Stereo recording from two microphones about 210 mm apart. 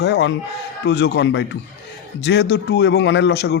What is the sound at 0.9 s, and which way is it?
A man's voice, 55° left (ahead or behind).